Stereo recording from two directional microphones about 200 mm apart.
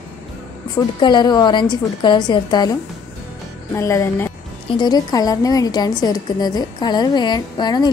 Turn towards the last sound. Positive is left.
turn(degrees=20)  # may be behind; listen again after turning